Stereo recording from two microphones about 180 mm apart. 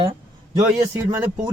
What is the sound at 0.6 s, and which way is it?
Speech, 15° right (ahead or behind).